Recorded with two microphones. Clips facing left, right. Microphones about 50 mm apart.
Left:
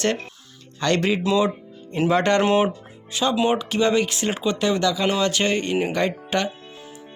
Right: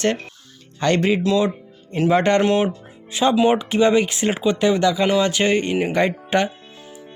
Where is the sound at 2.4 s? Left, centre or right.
Centre.